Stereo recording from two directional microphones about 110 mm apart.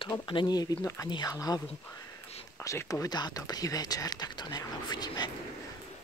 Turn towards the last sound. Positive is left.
turn(degrees=40)  # may be behind; listen again after turning